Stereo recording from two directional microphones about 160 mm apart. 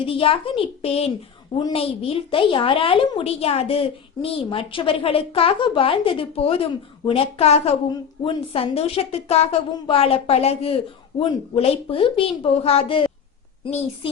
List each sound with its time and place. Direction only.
0.0 s a woman's voice: 35° left (ahead or behind)